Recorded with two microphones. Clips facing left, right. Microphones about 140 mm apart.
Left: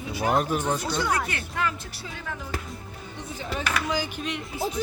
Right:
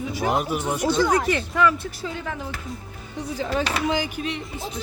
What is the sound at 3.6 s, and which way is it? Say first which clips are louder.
Speech: left 1 dB; 25° right (ahead or behind).